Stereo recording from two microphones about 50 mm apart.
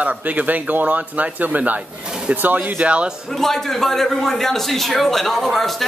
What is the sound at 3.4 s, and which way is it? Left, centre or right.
Speech, centre.